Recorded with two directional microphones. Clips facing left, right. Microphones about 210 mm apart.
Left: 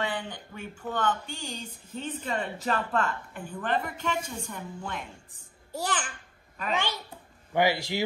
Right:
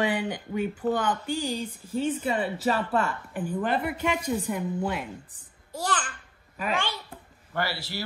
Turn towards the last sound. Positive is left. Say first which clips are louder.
# left 6 dB
turn(degrees=15)  # may be behind; listen again after turning